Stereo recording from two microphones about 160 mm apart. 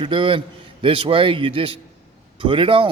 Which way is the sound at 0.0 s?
35° right (ahead or behind).